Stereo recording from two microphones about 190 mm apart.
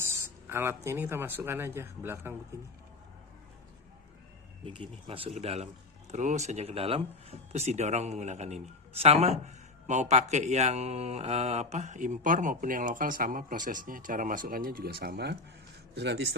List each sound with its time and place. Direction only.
0.4 s speech: 15° right (ahead or behind)
5.0 s a man's voice: 30° right (ahead or behind); by 16.2 s 65° right (ahead or behind)